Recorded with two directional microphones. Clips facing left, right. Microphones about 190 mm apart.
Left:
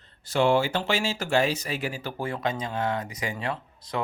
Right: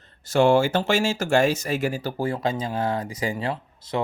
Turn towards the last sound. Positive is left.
turn(degrees=-30)  # may be behind; listen again after turning